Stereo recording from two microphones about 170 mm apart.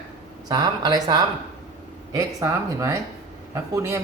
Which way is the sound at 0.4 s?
25° right (ahead or behind).